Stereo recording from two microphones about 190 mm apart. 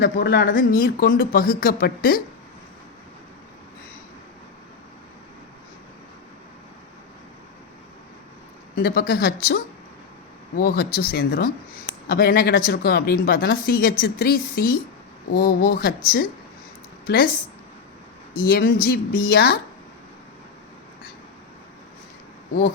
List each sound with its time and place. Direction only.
0.0 s speech: 55° left (ahead or behind)
8.7 s speech: 55° left (ahead or behind)
10.6 s speech: 55° left (ahead or behind)
18.3 s speech: 50° left (ahead or behind)